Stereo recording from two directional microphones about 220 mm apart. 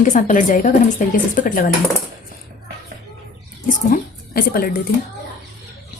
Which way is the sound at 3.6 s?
40° left (ahead or behind).